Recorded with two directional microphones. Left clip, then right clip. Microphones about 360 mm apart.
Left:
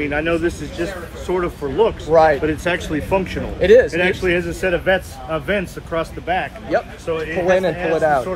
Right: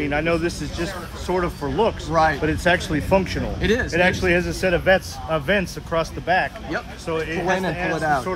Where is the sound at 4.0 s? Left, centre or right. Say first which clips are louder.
Left 1 dB; right.